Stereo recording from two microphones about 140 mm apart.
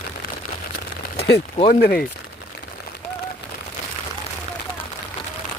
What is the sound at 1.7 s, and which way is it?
Speech, 90° left.